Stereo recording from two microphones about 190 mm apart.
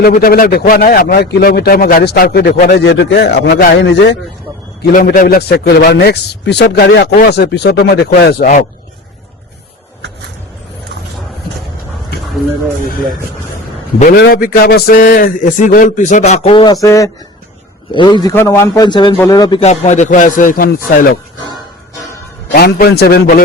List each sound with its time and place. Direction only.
0.0 s speech: 50° left (ahead or behind); by 4.2 s 65° left (ahead or behind)
4.8 s speech: 50° left (ahead or behind)
14.0 s a man's voice: 55° left (ahead or behind); by 16.7 s 30° left (ahead or behind)
16.8 s a man's voice: 15° left (ahead or behind)
19.6 s a man's voice: 40° left (ahead or behind)
22.5 s speech: 55° left (ahead or behind)